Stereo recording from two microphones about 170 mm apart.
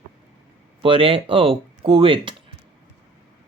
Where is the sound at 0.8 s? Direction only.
35° right (ahead or behind).